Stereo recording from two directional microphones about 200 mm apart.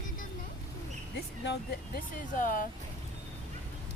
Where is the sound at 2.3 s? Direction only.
40° left (ahead or behind).